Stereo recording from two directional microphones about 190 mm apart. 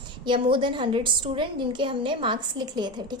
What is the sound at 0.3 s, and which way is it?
A woman's voice, 25° right (ahead or behind).